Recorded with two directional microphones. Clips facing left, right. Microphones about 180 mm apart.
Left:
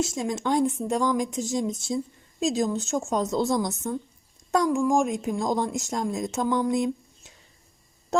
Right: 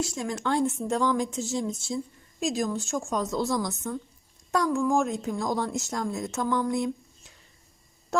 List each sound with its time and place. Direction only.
0.0 s a woman's voice: 20° left (ahead or behind)